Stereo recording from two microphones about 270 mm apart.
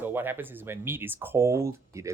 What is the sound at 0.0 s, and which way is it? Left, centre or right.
Speech, centre.